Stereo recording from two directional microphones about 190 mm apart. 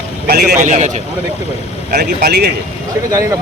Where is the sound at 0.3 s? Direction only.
55° right (ahead or behind).